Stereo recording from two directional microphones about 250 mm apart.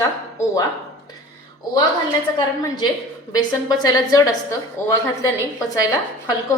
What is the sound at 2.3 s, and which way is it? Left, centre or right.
A woman's voice, centre.